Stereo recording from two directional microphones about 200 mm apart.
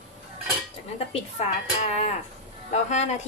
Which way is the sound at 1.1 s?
35° left (ahead or behind).